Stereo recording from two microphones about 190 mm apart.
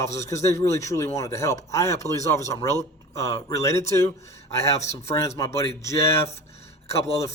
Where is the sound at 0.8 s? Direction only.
15° left (ahead or behind).